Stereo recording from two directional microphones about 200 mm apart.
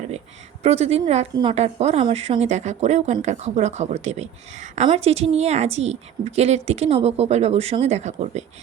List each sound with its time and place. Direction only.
0.6 s a woman's voice: 30° right (ahead or behind)